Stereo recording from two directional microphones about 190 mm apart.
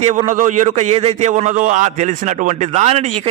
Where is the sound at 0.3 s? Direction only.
40° right (ahead or behind).